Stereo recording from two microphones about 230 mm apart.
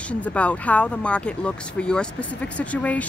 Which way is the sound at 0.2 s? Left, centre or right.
Centre.